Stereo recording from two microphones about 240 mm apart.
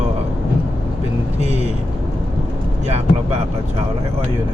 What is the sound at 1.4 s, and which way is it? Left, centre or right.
Vehicle, right.